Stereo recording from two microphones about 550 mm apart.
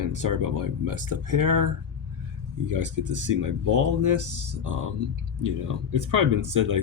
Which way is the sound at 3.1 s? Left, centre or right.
Right.